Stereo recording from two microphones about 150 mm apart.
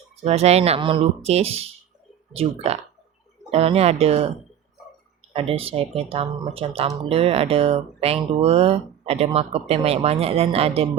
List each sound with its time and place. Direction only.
0.2 s speech: 45° right (ahead or behind)
5.3 s speech: 40° right (ahead or behind)